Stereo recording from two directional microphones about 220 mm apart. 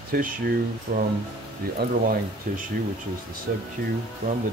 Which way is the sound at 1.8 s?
50° right (ahead or behind).